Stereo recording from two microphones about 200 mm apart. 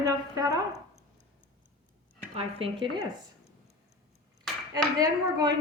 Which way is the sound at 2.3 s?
25° right (ahead or behind).